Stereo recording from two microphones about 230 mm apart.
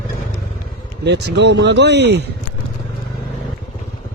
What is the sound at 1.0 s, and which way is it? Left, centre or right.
Speech, right.